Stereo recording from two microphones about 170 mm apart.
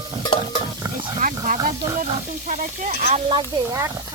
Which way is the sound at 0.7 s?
20° right (ahead or behind).